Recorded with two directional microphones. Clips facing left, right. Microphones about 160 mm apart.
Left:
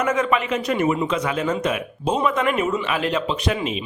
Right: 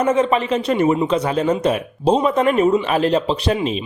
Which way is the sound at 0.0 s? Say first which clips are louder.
Right 4 dB; 30° right (ahead or behind).